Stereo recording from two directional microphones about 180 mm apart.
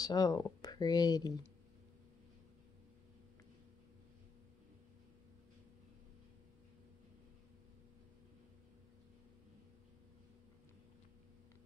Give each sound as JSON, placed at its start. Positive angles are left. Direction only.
{"t": 0.0, "sound": "speech", "side_deg": 20}